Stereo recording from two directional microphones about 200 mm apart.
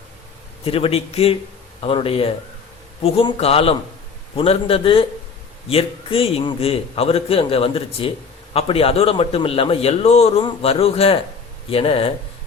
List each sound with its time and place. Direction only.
0.6 s a man's voice: 30° left (ahead or behind)